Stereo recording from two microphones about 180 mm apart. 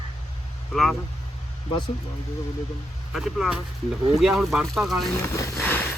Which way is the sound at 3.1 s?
Centre (ahead or behind).